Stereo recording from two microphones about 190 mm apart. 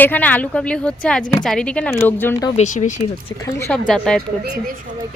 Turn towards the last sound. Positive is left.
turn(degrees=5)  # may be behind; listen again after turning